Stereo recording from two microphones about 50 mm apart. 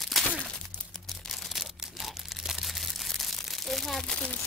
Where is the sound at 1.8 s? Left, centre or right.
Centre.